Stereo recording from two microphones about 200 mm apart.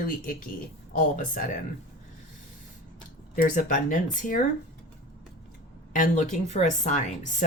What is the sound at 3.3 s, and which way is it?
Speech, 40° left (ahead or behind).